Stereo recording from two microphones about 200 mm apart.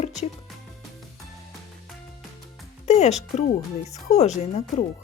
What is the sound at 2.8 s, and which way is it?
Speech, 35° left (ahead or behind).